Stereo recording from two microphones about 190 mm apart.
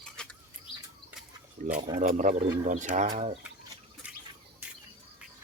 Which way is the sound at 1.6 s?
40° right (ahead or behind).